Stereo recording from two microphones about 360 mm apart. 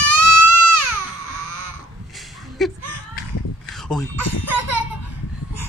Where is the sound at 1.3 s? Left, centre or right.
Right.